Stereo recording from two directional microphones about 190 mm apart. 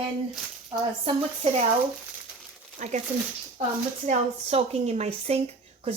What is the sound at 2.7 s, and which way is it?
Speech, 40° right (ahead or behind).